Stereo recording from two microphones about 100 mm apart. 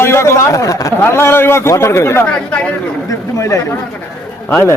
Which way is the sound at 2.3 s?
10° left (ahead or behind).